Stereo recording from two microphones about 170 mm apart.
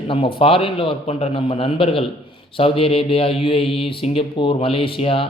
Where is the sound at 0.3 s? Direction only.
30° left (ahead or behind).